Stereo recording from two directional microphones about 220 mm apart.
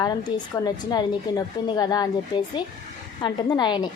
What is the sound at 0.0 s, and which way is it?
A woman's voice, 20° left (ahead or behind).